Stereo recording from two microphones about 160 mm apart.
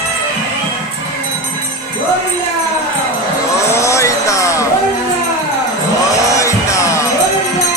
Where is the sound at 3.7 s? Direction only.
20° left (ahead or behind).